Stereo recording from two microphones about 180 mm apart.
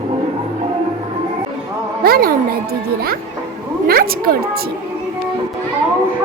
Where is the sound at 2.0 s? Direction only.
55° right (ahead or behind).